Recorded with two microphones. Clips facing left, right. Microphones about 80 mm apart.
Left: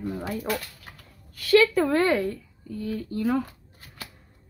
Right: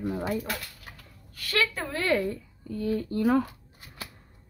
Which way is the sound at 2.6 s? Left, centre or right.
Right.